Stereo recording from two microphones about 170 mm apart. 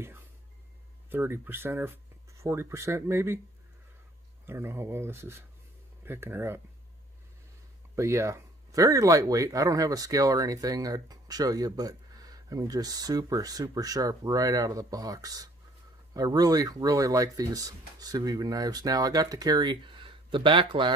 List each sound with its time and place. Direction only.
1.1 s speech: 15° right (ahead or behind)
4.5 s speech: 15° right (ahead or behind)
7.9 s speech: 15° right (ahead or behind)